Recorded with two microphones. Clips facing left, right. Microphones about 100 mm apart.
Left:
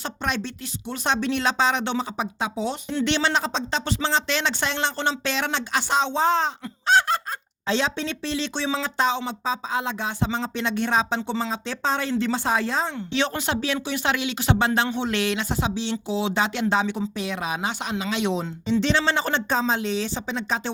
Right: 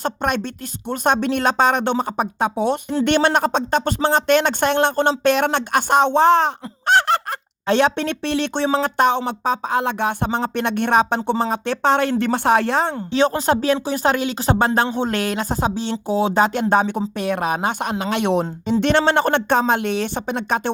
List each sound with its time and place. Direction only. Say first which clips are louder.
0.0 s speech: right 6 dB; 50° right (ahead or behind)
13.1 s speech: right 8 dB; 40° right (ahead or behind); by 20.6 s 55° right (ahead or behind)